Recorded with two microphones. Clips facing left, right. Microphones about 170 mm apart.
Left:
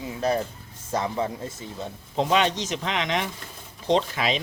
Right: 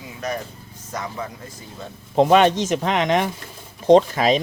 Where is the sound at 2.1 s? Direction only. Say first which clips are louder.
Right 8 dB; 55° right (ahead or behind).